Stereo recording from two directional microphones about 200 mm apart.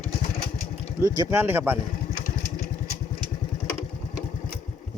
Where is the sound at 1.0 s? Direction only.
20° right (ahead or behind).